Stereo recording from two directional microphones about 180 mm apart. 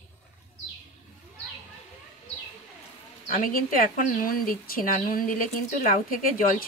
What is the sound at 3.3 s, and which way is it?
A woman's voice, 50° left (ahead or behind).